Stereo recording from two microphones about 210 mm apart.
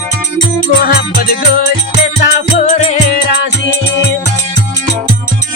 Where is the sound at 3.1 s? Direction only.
50° left (ahead or behind).